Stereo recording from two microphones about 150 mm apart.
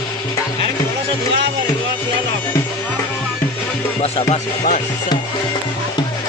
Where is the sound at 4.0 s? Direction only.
45° left (ahead or behind).